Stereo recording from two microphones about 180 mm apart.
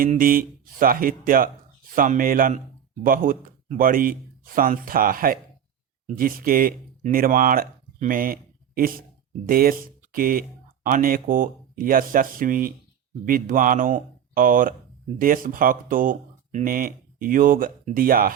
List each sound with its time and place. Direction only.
0.0 s speech: 50° right (ahead or behind)